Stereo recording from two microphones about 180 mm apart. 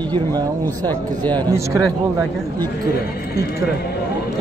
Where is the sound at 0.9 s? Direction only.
10° left (ahead or behind).